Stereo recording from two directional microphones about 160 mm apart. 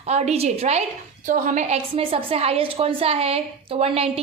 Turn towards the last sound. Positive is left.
turn(degrees=-35)  # may be behind; listen again after turning